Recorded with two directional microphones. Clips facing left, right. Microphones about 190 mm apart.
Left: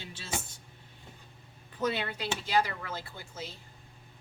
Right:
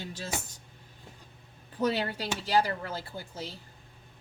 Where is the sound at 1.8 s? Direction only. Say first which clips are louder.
Right 3 dB; 35° right (ahead or behind).